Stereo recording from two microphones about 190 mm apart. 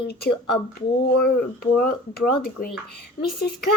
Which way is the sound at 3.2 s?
55° left (ahead or behind).